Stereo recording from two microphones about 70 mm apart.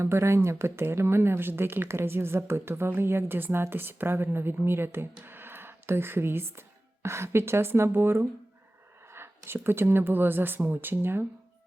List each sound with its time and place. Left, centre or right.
0.0 s speech: right